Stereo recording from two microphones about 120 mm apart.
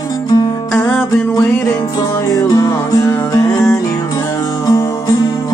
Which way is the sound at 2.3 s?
30° left (ahead or behind).